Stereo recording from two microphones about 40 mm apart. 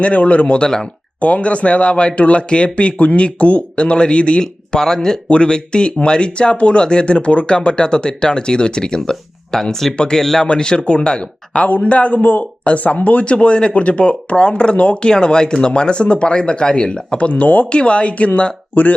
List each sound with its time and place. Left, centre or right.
0.0 s speech: left
4.8 s speech: centre
10.4 s speech: left
17.7 s speech: left
18.7 s speech: left